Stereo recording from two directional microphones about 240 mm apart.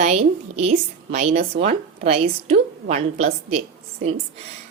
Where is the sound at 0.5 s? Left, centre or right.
Right.